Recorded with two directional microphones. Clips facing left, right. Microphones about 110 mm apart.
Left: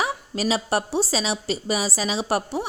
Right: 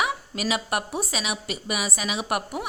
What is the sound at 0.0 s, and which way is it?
A woman's voice, 30° left (ahead or behind).